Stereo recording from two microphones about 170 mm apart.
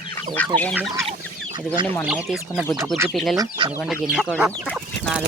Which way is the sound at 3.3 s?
20° right (ahead or behind).